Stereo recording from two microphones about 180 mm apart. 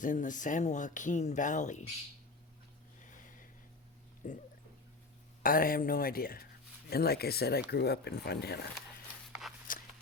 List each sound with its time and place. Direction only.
0.0 s speech: 45° left (ahead or behind)
4.2 s speech: 50° left (ahead or behind)
9.7 s a sound: 50° left (ahead or behind)